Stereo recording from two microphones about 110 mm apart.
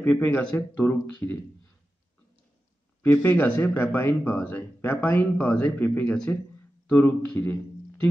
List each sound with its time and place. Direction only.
0.0 s speech: 20° left (ahead or behind)
3.0 s speech: 20° left (ahead or behind)